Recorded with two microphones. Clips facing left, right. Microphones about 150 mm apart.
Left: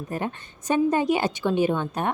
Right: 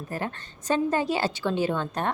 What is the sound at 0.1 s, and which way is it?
A woman's voice, 20° left (ahead or behind).